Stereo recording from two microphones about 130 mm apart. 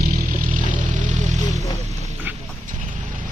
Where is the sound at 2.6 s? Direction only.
80° right.